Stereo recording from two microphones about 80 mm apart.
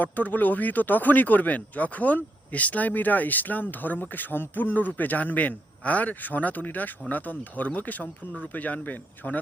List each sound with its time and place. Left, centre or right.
0.0 s speech: left